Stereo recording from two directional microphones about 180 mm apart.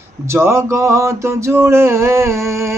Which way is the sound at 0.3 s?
15° right (ahead or behind).